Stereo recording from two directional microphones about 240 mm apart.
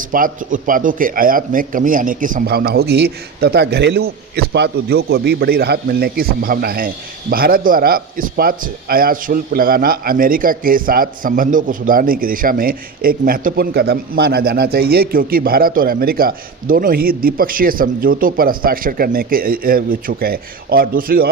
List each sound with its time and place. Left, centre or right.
0.1 s a man's voice: right